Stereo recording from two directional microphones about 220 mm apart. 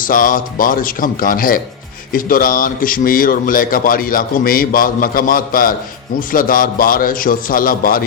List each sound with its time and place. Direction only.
0.0 s a man's voice: 40° left (ahead or behind)